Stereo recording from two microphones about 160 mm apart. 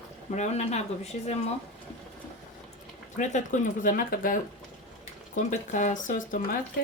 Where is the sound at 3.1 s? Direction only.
50° left (ahead or behind).